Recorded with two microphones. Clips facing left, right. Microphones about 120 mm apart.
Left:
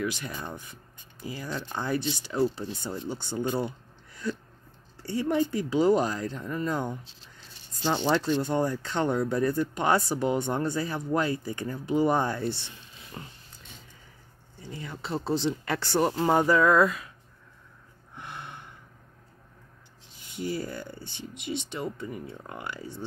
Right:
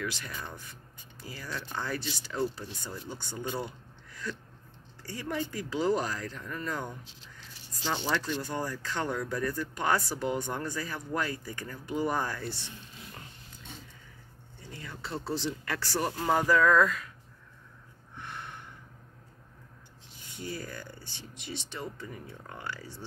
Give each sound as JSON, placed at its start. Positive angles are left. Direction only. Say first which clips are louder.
{"t": 0.0, "sound": "speech", "louder": "left 5 dB", "side_deg": 20}
{"t": 4.1, "sound": "a sound", "louder": "left 6 dB", "side_deg": 20}
{"t": 5.0, "sound": "speech", "louder": "left 9 dB", "side_deg": 25}
{"t": 8.4, "sound": "speech", "louder": "left 8 dB", "side_deg": 25}
{"t": 14.6, "sound": "speech", "louder": "left 5 dB", "side_deg": 25}
{"t": 18.1, "sound": "gasp", "louder": "left 1 dB", "side_deg": 20}
{"t": 20.2, "sound": "speech", "louder": "left 7 dB", "side_deg": 20}